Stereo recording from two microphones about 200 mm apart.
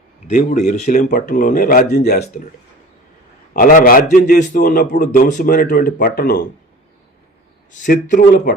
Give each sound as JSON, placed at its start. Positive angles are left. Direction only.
{"t": 0.3, "sound": "a man's voice", "side_deg": 35}
{"t": 3.5, "sound": "a man's voice", "side_deg": 40}
{"t": 7.7, "sound": "speech", "side_deg": 40}